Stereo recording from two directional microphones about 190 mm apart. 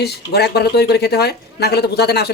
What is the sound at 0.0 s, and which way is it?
Speech, 60° left (ahead or behind).